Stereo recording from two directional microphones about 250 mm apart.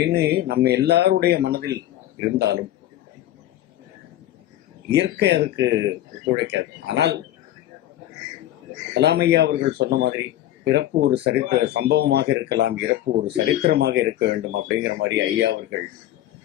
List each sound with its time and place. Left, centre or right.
0.0 s speech: right
4.9 s speech: right
9.0 s speech: right